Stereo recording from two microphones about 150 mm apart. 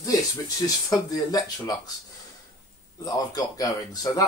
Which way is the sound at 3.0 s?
25° left (ahead or behind).